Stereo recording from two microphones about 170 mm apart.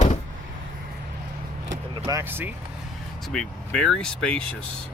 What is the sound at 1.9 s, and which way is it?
Speech, 25° right (ahead or behind).